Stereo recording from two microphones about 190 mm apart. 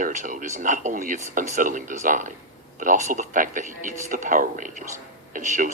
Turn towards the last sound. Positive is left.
turn(degrees=-45)  # may be behind; listen again after turning